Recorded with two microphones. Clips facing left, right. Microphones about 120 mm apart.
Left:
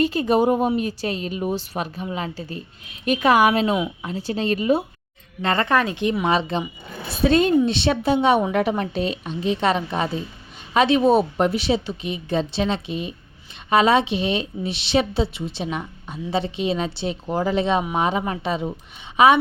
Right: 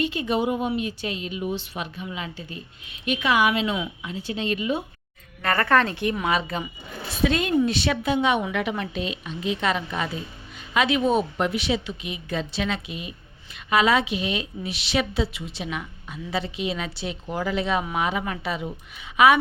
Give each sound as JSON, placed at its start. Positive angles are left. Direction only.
{"t": 0.0, "sound": "a woman's voice", "side_deg": 40}
{"t": 5.4, "sound": "a woman's voice", "side_deg": 25}